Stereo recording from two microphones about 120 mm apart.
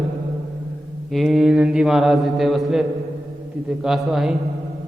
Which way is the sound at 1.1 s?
Centre (ahead or behind).